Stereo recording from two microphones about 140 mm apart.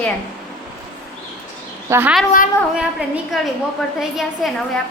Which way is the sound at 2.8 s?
5° right (ahead or behind).